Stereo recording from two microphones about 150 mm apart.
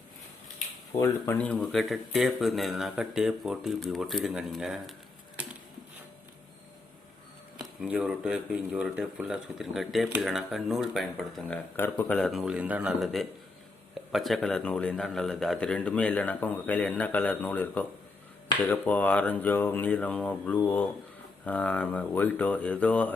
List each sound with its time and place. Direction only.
0.9 s speech: 20° left (ahead or behind)
1.6 s speech: centre (ahead or behind)
7.5 s a man's voice: 5° right (ahead or behind)